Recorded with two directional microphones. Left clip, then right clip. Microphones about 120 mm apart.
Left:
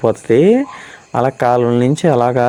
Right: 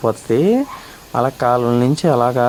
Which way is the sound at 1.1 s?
20° left (ahead or behind).